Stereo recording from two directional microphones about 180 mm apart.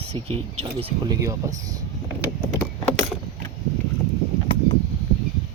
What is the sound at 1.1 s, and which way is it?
Speech, 15° right (ahead or behind).